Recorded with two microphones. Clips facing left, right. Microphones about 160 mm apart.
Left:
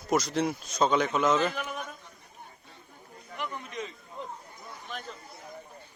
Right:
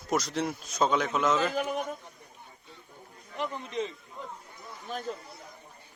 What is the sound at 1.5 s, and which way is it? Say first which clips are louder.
Speech: right 6 dB; 30° right (ahead or behind).